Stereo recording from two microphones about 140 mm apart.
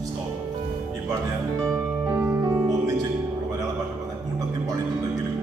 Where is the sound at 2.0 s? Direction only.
15° right (ahead or behind).